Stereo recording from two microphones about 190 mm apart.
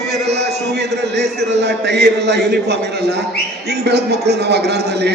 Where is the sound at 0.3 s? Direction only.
60° right (ahead or behind).